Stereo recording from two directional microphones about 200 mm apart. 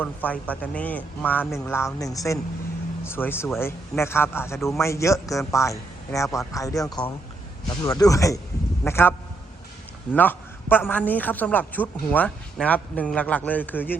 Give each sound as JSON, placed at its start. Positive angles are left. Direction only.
{"t": 0.0, "sound": "a man's voice", "side_deg": 5}